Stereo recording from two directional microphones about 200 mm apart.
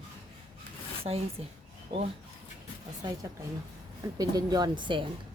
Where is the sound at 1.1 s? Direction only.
30° right (ahead or behind).